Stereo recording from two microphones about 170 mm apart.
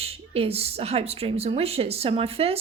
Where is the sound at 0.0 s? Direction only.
35° right (ahead or behind).